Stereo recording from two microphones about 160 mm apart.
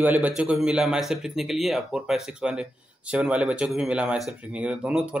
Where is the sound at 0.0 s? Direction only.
10° right (ahead or behind).